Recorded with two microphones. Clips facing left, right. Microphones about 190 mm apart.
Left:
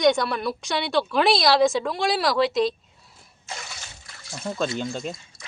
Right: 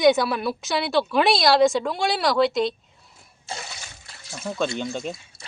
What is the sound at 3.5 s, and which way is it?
Water, 30° right (ahead or behind).